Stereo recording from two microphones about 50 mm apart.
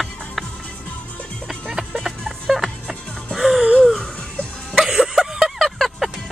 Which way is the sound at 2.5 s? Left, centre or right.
Centre.